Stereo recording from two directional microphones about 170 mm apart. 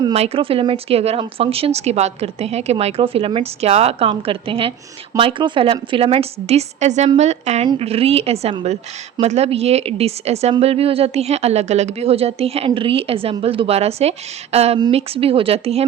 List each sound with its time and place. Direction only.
0.0 s a woman's voice: 35° right (ahead or behind)